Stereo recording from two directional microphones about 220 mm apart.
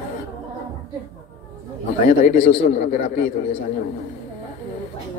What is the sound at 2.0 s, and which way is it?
A man's voice, 30° left (ahead or behind).